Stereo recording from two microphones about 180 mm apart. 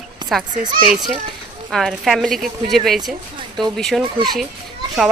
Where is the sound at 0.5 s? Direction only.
45° right (ahead or behind).